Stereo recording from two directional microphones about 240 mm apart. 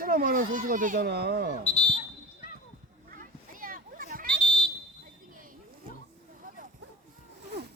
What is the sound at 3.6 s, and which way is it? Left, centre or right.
Children playing, right.